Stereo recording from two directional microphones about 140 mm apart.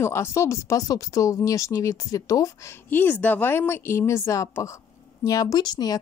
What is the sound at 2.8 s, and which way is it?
A woman's voice, 15° left (ahead or behind).